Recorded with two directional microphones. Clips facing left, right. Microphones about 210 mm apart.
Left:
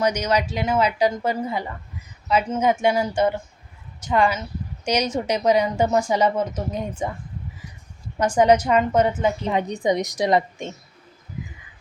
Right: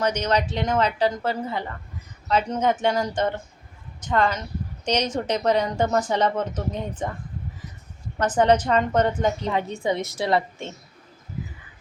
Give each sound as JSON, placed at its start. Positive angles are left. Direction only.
{"t": 0.0, "sound": "speech", "side_deg": 10}
{"t": 8.2, "sound": "speech", "side_deg": 10}
{"t": 9.5, "sound": "speech", "side_deg": 15}